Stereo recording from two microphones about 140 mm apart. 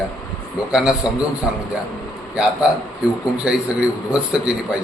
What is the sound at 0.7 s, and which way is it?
Speech, 5° right (ahead or behind).